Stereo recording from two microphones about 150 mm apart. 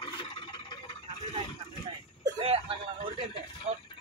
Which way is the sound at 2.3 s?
40° right (ahead or behind).